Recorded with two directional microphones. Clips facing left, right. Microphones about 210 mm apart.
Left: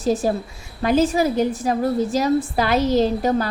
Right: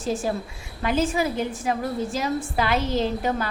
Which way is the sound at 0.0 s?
40° left (ahead or behind).